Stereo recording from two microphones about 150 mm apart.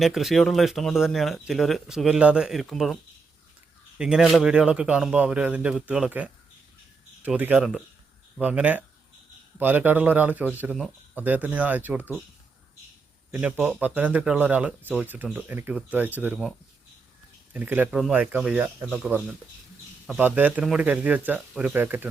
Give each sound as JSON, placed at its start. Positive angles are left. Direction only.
{"t": 0.0, "sound": "a man's voice", "side_deg": 0}
{"t": 13.3, "sound": "a man's voice", "side_deg": -10}
{"t": 17.5, "sound": "a man's voice", "side_deg": -10}